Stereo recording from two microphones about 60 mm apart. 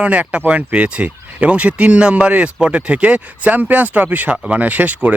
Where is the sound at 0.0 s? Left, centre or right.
Right.